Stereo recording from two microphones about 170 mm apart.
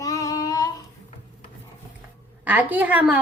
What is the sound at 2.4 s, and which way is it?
Speech, 10° right (ahead or behind).